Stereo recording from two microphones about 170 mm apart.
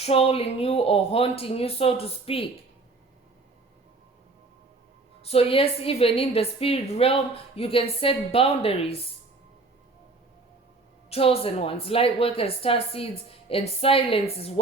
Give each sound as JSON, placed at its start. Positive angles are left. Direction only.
{"t": 0.0, "sound": "a woman's voice", "side_deg": 35}
{"t": 5.2, "sound": "a woman's voice", "side_deg": 35}
{"t": 11.1, "sound": "a woman's voice", "side_deg": 35}